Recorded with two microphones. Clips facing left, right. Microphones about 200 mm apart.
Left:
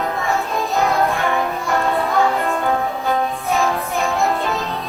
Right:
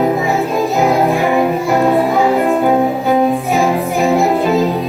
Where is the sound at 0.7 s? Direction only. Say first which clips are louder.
Right 4 dB; centre (ahead or behind).